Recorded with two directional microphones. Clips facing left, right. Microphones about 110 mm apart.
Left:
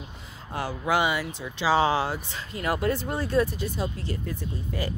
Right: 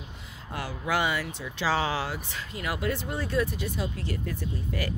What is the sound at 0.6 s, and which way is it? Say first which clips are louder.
Speech: left 3 dB; 25° left (ahead or behind).